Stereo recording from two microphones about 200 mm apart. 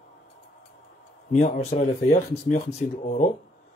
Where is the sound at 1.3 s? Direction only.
35° left (ahead or behind).